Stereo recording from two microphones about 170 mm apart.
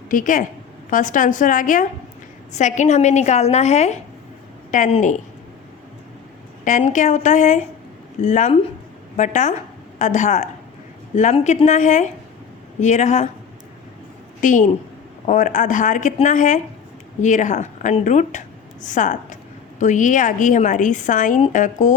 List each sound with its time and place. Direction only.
0.1 s a woman's voice: 50° left (ahead or behind)
6.7 s a woman's voice: 50° left (ahead or behind)
14.4 s a woman's voice: 50° left (ahead or behind)